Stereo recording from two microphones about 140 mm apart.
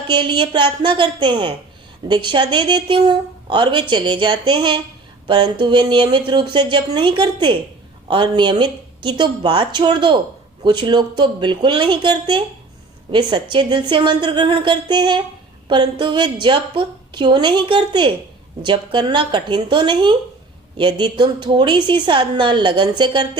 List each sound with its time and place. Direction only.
0.1 s speech: 35° right (ahead or behind)